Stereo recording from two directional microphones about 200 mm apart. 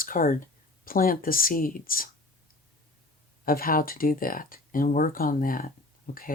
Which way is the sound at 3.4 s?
45° left (ahead or behind).